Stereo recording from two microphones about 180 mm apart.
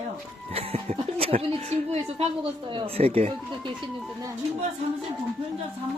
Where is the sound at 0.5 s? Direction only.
35° right (ahead or behind).